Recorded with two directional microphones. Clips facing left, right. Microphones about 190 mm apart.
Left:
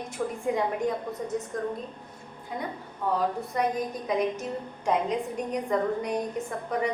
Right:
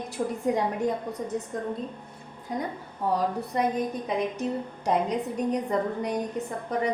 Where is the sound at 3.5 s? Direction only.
30° right (ahead or behind).